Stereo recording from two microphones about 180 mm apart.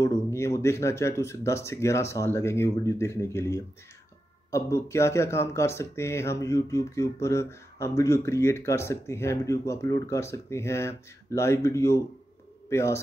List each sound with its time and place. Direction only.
0.0 s a man's voice: 15° left (ahead or behind)